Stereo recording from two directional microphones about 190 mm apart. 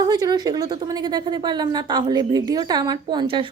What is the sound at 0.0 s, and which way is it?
A woman's voice, 20° right (ahead or behind).